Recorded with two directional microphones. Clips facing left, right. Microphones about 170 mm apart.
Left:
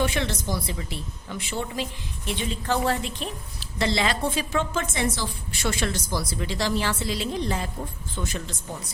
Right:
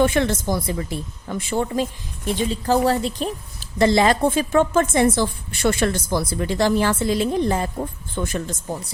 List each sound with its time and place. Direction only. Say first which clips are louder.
0.0 s a woman's voice: right 8 dB; 50° right (ahead or behind)